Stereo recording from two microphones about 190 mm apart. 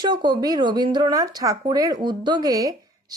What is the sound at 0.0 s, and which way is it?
Speech, 25° right (ahead or behind).